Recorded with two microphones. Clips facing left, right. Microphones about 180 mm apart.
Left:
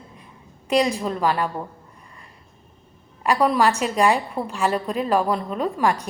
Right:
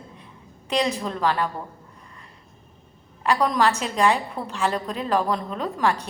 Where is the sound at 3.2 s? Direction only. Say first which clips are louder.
Left 2 dB; 10° left (ahead or behind).